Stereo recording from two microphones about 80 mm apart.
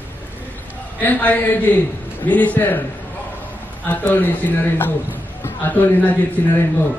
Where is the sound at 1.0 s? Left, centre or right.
Left.